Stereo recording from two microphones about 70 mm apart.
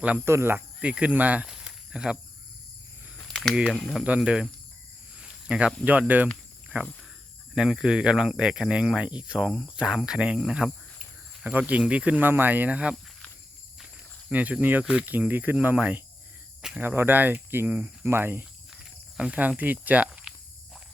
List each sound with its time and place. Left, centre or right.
0.3 s speech: right
0.8 s speech: centre
1.5 s snake: centre
3.2 s a sound: centre
3.5 s speech: centre
5.1 s a sound: centre
5.8 s speech: right
7.5 s speech: centre
11.5 s speech: right
12.2 s speech: right
14.3 s speech: centre
18.7 s speech: centre
20.1 s walk: centre